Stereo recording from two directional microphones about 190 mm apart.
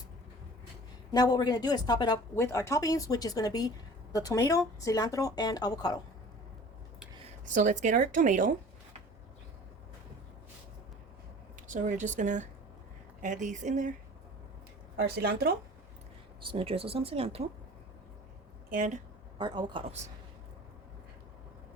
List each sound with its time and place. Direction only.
1.1 s a woman's voice: 20° left (ahead or behind)
7.5 s speech: 40° right (ahead or behind)
11.7 s speech: 40° right (ahead or behind)
14.9 s speech: 60° right (ahead or behind)
16.4 s speech: 30° right (ahead or behind)
18.7 s speech: 45° right (ahead or behind)
19.4 s speech: 20° right (ahead or behind)